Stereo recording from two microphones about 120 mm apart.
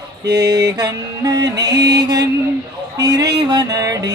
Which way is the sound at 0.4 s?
30° right (ahead or behind).